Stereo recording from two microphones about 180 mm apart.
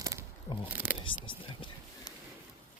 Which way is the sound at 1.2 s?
30° left (ahead or behind).